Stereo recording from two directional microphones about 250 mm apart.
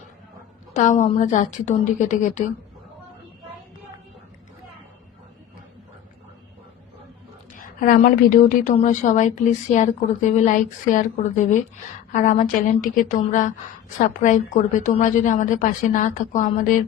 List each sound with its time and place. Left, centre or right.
0.7 s a woman's voice: left
7.6 s a woman's voice: left